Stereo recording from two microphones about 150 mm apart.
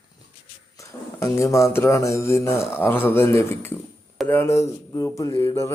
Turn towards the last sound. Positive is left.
turn(degrees=20)  # may be behind; listen again after turning